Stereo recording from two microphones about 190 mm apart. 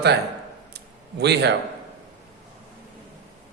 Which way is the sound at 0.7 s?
60° right (ahead or behind).